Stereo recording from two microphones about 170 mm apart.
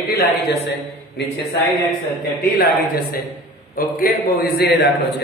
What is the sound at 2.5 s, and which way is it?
A man's voice, 60° left (ahead or behind).